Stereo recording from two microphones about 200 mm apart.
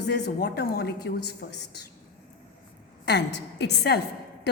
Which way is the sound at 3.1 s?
55° left (ahead or behind).